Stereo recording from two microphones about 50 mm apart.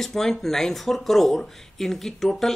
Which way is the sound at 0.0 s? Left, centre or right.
Centre.